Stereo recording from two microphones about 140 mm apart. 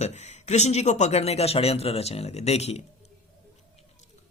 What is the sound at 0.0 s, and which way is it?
A man's voice, 55° left (ahead or behind).